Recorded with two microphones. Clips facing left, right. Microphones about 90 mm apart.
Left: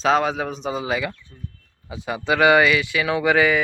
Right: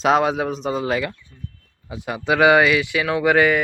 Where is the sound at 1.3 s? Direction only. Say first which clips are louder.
Even; 25° left (ahead or behind).